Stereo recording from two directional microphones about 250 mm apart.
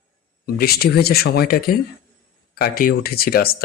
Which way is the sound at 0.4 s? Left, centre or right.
Left.